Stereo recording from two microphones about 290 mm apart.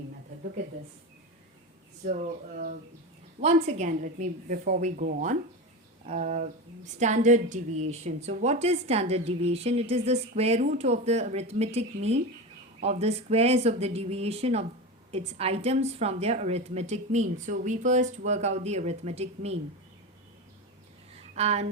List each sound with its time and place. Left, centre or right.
2.0 s a woman's voice: right
21.3 s a woman's voice: right